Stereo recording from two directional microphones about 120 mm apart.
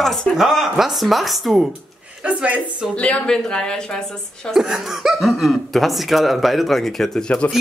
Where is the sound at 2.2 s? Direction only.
10° right (ahead or behind).